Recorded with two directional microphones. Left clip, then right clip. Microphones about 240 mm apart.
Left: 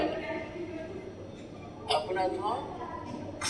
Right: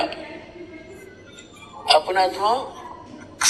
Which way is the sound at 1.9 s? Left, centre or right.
Right.